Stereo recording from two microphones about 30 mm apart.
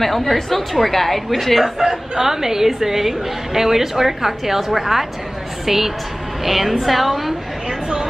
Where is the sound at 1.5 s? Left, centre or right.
Centre.